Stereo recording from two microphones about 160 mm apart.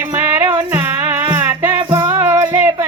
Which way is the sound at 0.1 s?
20° right (ahead or behind).